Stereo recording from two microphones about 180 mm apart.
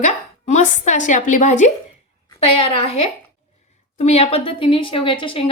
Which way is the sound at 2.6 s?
35° left (ahead or behind).